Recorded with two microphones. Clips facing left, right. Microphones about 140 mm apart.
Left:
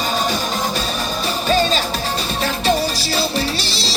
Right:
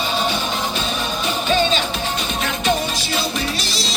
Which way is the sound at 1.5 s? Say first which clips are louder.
Left 2 dB; 40° left (ahead or behind).